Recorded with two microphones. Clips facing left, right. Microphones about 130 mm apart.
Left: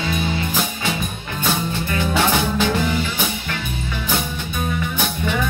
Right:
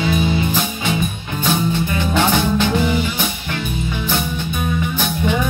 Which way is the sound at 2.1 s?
5° left (ahead or behind).